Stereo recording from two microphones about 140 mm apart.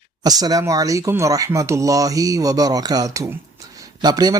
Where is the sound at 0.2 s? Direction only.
25° right (ahead or behind).